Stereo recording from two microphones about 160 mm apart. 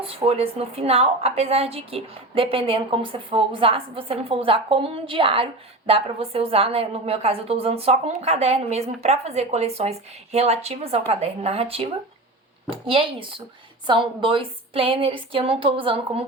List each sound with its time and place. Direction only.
0.0 s a woman's voice: 35° right (ahead or behind)